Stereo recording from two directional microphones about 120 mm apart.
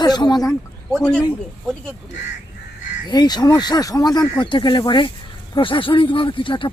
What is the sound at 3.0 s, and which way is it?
Speech, 35° left (ahead or behind).